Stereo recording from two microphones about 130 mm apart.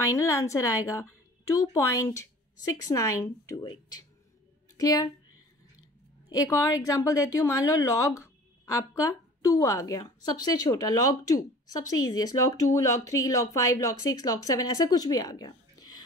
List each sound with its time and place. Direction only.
0.1 s speech: 20° left (ahead or behind)
4.7 s speech: 30° left (ahead or behind)
6.2 s speech: 25° left (ahead or behind)